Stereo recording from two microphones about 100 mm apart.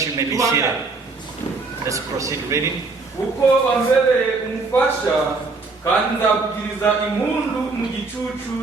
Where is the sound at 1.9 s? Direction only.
35° right (ahead or behind).